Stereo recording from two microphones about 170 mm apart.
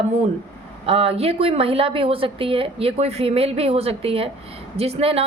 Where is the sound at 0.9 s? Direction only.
35° right (ahead or behind).